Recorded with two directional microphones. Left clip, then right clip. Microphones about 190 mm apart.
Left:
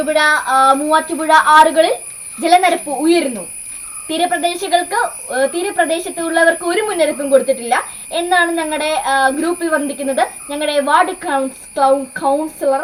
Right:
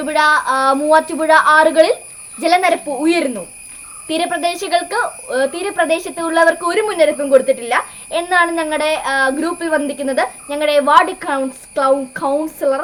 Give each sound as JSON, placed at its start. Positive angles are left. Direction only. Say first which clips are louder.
{"t": 0.1, "sound": "a woman's voice", "louder": "even", "side_deg": -25}